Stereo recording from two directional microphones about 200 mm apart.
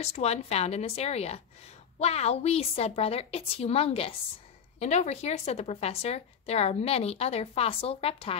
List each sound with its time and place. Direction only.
0.0 s a woman's voice: 30° left (ahead or behind)